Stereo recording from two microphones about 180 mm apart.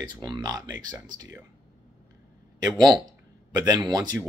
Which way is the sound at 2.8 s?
25° right (ahead or behind).